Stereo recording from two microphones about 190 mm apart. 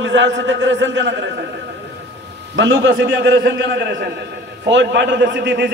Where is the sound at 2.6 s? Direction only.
80° right.